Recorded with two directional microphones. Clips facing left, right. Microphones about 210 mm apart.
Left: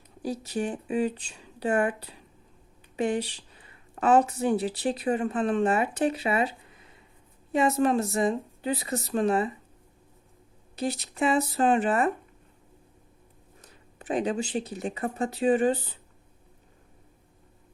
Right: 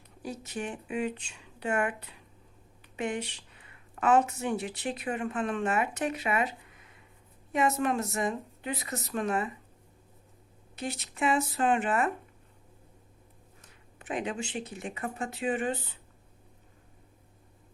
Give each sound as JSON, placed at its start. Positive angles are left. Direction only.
{"t": 0.2, "sound": "speech", "side_deg": 35}
{"t": 10.8, "sound": "speech", "side_deg": 35}
{"t": 13.6, "sound": "speech", "side_deg": 35}